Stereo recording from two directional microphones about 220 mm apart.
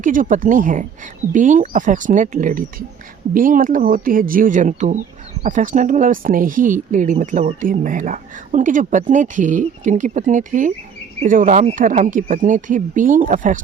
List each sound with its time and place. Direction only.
0.0 s speech: 35° right (ahead or behind)